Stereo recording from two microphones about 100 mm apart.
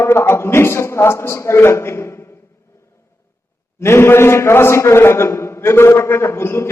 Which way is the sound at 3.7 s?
25° left (ahead or behind).